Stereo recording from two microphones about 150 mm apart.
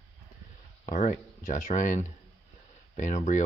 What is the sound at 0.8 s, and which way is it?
Speech, 50° left (ahead or behind).